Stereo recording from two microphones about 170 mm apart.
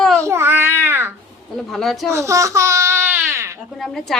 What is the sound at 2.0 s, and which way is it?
Baby cry, 15° right (ahead or behind).